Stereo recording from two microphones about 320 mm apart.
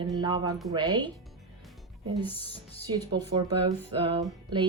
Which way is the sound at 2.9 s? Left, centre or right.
Centre.